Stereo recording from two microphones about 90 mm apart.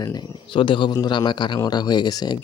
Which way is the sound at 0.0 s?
50° left (ahead or behind).